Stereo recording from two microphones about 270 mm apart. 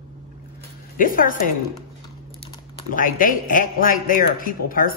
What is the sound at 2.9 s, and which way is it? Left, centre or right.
A man's voice, left.